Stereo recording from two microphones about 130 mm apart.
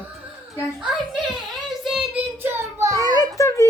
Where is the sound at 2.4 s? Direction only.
20° right (ahead or behind).